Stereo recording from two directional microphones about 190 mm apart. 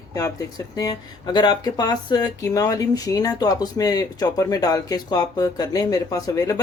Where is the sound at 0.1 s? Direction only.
15° left (ahead or behind).